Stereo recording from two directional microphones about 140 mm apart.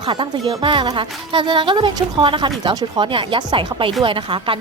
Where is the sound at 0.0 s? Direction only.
35° right (ahead or behind).